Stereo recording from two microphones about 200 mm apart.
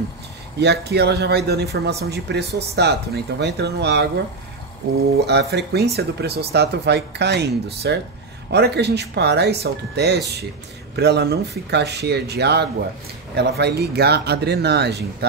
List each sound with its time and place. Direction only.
0.6 s a man's voice: 55° right (ahead or behind)
5.1 s a man's voice: 55° right (ahead or behind)